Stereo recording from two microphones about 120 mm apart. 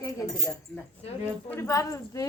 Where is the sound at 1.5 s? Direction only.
25° left (ahead or behind).